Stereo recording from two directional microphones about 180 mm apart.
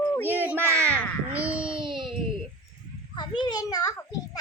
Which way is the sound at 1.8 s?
25° right (ahead or behind).